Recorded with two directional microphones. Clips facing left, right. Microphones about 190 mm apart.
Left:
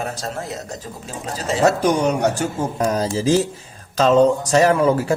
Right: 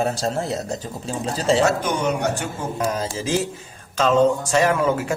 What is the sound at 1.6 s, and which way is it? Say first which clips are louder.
Speech: left 4 dB; 35° left (ahead or behind).